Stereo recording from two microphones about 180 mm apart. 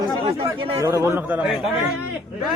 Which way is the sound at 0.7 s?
15° right (ahead or behind).